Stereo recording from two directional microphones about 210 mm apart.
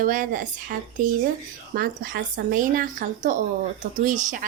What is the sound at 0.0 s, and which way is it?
Speech, 40° right (ahead or behind).